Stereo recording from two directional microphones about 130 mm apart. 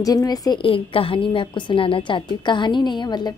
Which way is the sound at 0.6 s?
45° left (ahead or behind).